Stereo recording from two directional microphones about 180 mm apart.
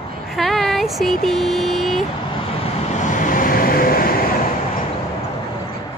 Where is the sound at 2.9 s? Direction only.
45° left (ahead or behind).